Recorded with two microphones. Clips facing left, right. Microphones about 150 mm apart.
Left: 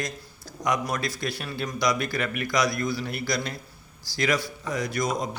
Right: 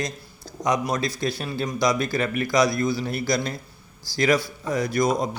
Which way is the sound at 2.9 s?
35° right (ahead or behind).